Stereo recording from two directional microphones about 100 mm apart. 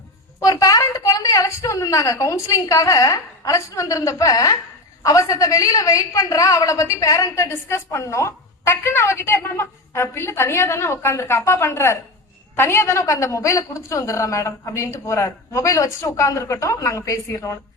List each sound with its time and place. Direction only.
0.3 s a woman's voice: 40° left (ahead or behind)